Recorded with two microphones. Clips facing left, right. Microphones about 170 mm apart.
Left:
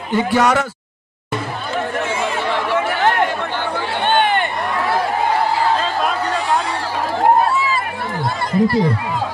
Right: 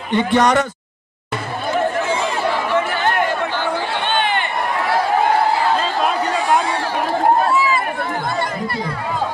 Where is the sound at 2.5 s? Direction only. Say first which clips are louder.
Even; 80° left.